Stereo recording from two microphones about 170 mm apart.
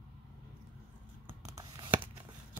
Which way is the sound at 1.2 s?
20° right (ahead or behind).